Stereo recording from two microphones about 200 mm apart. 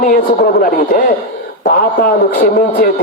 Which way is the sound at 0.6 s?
45° left (ahead or behind).